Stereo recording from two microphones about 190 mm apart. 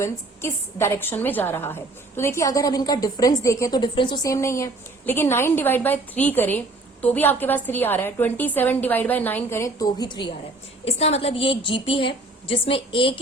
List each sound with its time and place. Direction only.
0.0 s a woman's voice: 15° left (ahead or behind)